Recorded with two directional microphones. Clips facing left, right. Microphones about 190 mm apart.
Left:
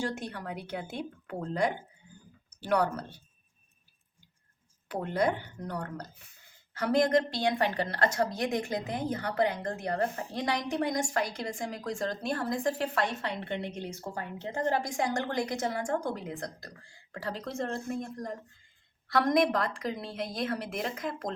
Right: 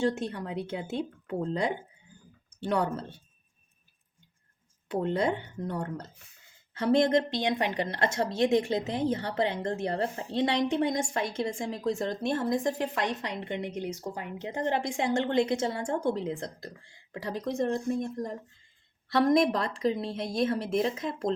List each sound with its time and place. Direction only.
0.0 s a woman's voice: 25° right (ahead or behind)
4.9 s a woman's voice: 25° right (ahead or behind)